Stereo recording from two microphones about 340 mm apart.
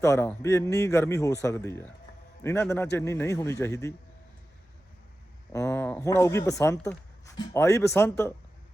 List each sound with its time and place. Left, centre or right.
0.0 s speech: centre
5.5 s speech: centre